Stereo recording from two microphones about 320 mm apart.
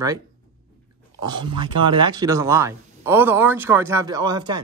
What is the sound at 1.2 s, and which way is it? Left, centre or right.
Speech, centre.